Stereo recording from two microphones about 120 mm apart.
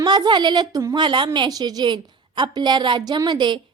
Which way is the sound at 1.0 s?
40° right (ahead or behind).